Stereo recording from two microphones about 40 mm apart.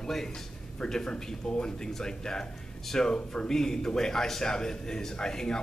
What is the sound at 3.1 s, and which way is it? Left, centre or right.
Speech, left.